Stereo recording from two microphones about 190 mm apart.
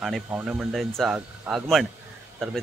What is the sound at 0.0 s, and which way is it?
A man's voice, centre (ahead or behind).